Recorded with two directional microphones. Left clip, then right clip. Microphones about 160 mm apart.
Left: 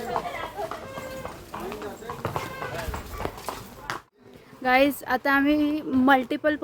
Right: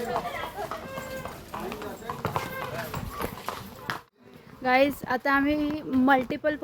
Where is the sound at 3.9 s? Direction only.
30° right (ahead or behind).